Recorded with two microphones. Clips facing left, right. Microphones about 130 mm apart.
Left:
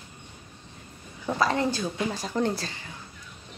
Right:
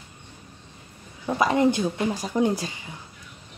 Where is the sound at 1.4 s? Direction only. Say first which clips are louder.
Right 5 dB; 20° right (ahead or behind).